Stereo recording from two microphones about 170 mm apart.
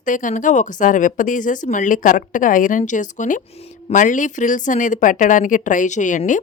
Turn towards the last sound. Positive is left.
turn(degrees=50)  # may be behind; listen again after turning